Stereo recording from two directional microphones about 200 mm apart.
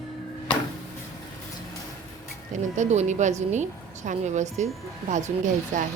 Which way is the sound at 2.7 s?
35° right (ahead or behind).